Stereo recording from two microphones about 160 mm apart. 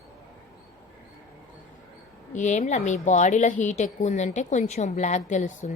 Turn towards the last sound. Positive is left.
turn(degrees=50)  # may be behind; listen again after turning